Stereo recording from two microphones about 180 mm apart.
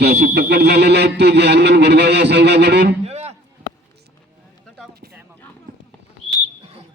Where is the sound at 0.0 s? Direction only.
65° right (ahead or behind).